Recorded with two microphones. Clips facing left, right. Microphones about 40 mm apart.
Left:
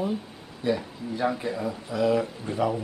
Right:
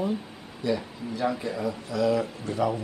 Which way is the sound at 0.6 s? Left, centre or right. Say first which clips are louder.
Left 1 dB; left.